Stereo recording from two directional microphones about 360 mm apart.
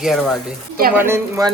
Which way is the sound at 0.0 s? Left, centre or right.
Centre.